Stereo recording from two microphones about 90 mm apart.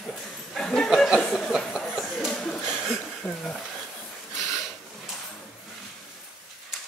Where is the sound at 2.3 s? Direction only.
10° left (ahead or behind).